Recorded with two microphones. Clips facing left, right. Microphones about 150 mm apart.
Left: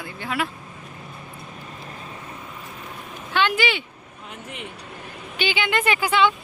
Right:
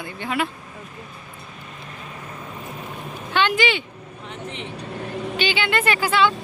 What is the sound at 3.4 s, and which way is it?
Speech, 5° left (ahead or behind).